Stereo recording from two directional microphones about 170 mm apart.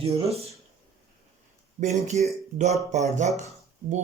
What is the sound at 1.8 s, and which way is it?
A man's voice, 40° right (ahead or behind).